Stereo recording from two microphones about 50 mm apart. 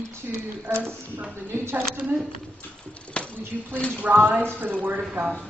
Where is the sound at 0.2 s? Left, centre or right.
Right.